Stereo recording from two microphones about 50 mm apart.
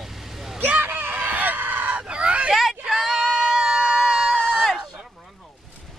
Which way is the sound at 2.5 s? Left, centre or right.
Centre.